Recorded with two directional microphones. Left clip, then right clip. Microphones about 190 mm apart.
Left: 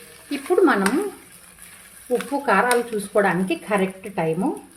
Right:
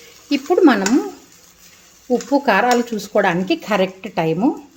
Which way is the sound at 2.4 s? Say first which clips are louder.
Right 1 dB; 40° right (ahead or behind).